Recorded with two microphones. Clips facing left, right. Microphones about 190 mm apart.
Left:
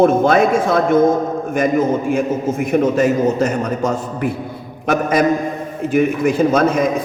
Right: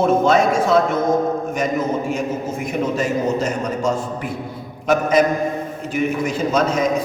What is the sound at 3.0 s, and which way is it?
Speech, 60° left (ahead or behind).